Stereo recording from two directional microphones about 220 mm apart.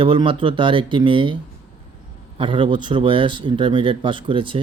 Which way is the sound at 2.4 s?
20° right (ahead or behind).